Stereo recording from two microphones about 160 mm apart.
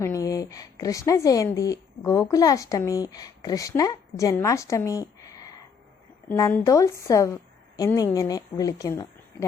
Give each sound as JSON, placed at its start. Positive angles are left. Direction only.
{"t": 0.0, "sound": "a woman's voice", "side_deg": 20}